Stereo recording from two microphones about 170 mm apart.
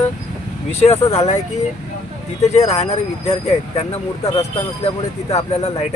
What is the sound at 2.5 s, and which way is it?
Speech, 40° left (ahead or behind).